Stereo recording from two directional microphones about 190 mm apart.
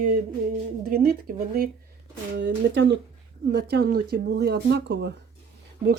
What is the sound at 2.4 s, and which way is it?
Speech, 65° right (ahead or behind).